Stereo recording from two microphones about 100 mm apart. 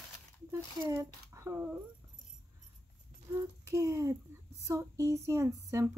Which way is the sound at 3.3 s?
30° right (ahead or behind).